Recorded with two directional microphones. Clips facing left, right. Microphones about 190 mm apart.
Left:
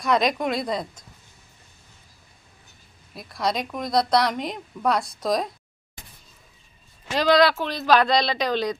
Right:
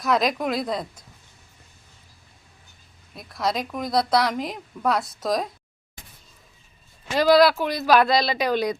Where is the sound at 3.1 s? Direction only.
Centre (ahead or behind).